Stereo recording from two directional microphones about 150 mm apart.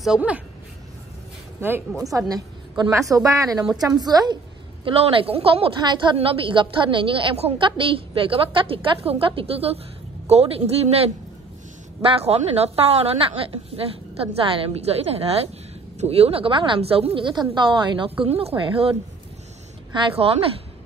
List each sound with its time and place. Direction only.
0.0 s a woman's voice: 5° right (ahead or behind)
2.1 s a woman's voice: 25° right (ahead or behind)
4.8 s a woman's voice: 40° right (ahead or behind)